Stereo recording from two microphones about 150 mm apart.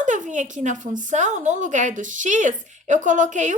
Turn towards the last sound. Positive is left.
turn(degrees=-55)  # may be behind; listen again after turning